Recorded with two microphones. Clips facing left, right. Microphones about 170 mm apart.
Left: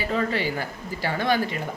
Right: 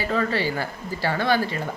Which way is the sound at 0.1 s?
20° left (ahead or behind).